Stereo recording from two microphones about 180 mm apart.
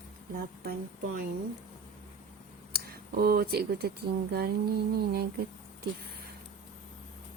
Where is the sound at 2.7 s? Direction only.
55° right (ahead or behind).